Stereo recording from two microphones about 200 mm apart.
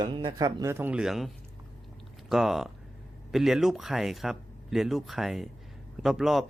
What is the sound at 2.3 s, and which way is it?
Speech, centre (ahead or behind).